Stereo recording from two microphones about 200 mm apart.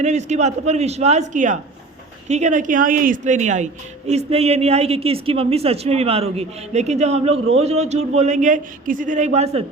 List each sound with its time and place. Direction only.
0.0 s speech: 35° right (ahead or behind)